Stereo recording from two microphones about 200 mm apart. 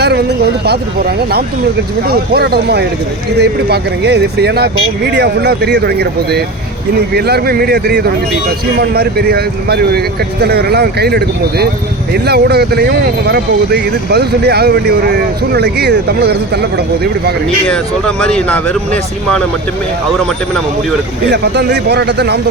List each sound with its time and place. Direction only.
0.0 s speech: 55° right (ahead or behind)
2.0 s speech: 50° right (ahead or behind)
17.7 s speech: 5° left (ahead or behind)
21.2 s speech: 55° right (ahead or behind)